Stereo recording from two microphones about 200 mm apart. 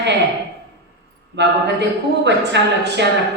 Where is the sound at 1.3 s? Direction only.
60° right (ahead or behind).